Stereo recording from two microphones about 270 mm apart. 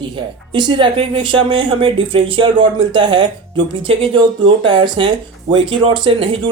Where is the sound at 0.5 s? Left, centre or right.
Centre.